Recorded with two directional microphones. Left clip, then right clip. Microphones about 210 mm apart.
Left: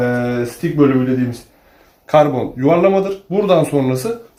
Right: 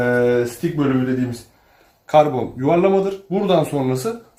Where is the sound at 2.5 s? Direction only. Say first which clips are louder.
Left 3 dB; 15° left (ahead or behind).